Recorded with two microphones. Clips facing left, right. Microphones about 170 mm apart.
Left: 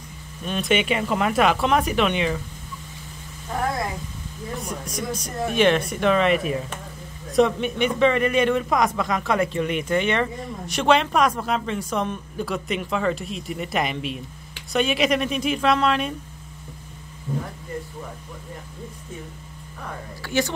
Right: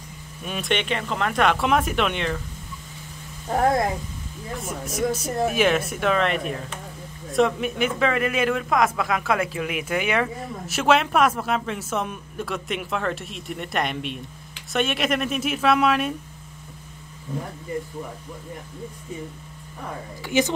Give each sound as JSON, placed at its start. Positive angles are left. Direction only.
{"t": 0.4, "sound": "a man's voice", "side_deg": -5}
{"t": 4.6, "sound": "a man's voice", "side_deg": -5}
{"t": 20.2, "sound": "speech", "side_deg": -20}